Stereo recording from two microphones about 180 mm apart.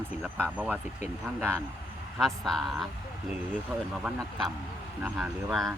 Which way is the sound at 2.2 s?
Centre (ahead or behind).